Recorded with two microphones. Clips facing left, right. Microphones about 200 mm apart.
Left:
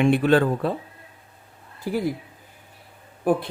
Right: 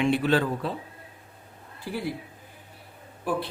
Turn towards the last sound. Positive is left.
turn(degrees=50)  # may be behind; listen again after turning